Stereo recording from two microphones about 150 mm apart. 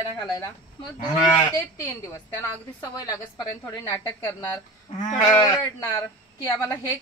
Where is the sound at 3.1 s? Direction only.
20° left (ahead or behind).